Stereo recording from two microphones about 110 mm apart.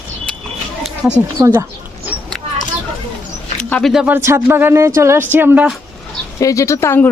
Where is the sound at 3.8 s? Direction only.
5° right (ahead or behind).